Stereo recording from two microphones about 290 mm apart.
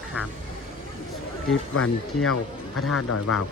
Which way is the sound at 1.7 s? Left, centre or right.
Left.